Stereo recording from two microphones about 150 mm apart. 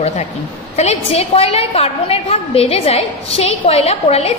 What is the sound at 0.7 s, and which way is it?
A woman's voice, 45° left (ahead or behind).